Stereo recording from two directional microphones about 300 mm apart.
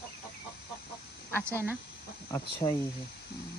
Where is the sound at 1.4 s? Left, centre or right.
Centre.